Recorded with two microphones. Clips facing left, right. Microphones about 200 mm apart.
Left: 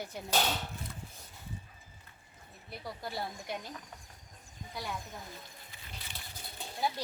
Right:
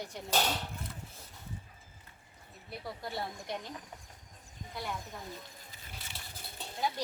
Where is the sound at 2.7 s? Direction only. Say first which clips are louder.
Right 1 dB; centre (ahead or behind).